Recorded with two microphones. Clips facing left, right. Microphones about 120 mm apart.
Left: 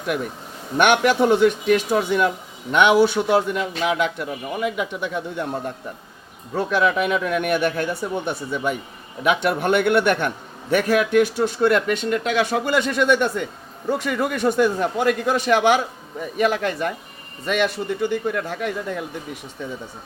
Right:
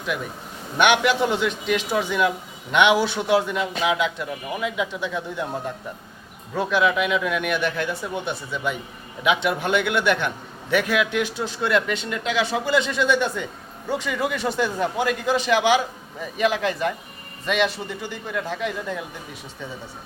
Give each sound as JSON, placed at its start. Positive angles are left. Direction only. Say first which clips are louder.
{"t": 0.8, "sound": "a man's voice", "louder": "left 2 dB", "side_deg": 50}
{"t": 6.5, "sound": "a man's voice", "louder": "left 1 dB", "side_deg": 40}